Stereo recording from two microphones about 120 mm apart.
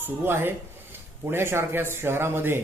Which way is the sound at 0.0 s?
20° right (ahead or behind).